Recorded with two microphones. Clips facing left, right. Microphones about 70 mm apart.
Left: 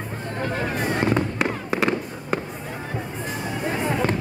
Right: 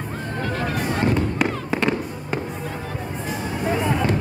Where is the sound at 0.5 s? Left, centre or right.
Centre.